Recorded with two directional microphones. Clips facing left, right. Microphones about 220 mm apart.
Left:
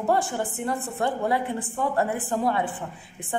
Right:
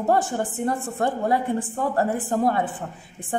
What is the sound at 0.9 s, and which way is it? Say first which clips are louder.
Speech: right 1 dB; 45° right (ahead or behind).